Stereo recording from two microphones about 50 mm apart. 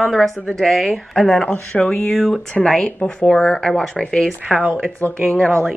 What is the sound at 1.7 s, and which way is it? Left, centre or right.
Speech, centre.